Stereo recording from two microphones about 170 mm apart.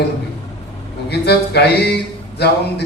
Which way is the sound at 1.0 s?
75° left (ahead or behind).